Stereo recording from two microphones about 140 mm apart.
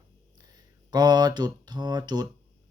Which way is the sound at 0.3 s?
30° right (ahead or behind).